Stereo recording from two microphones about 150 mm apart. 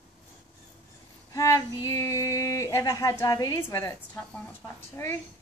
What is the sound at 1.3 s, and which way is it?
Speech, 20° left (ahead or behind).